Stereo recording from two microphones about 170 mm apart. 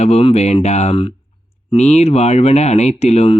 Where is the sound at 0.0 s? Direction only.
40° left (ahead or behind).